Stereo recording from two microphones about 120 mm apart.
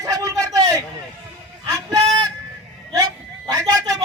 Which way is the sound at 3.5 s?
30° right (ahead or behind).